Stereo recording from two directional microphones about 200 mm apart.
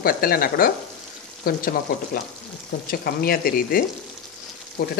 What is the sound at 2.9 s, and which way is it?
Speech, 50° left (ahead or behind).